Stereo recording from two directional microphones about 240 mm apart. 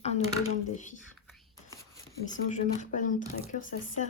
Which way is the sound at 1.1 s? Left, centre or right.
Centre.